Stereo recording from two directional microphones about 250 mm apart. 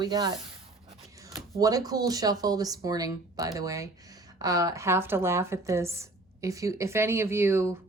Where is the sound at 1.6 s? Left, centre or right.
Centre.